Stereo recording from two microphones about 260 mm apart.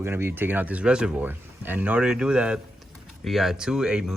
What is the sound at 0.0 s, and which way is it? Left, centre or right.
Speech, centre.